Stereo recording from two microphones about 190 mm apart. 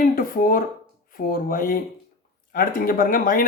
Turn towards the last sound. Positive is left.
turn(degrees=50)  # may be behind; listen again after turning